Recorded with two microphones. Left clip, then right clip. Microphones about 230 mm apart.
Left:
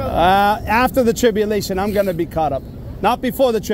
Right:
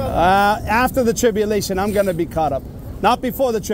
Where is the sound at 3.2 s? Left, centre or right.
Centre.